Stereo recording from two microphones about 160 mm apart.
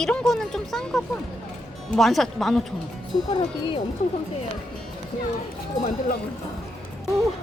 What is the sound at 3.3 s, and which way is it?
Speech, 30° left (ahead or behind).